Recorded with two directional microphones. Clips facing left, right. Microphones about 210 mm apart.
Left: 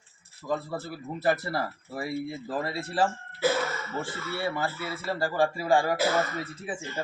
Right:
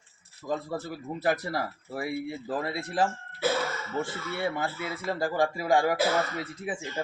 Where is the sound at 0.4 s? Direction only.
15° right (ahead or behind).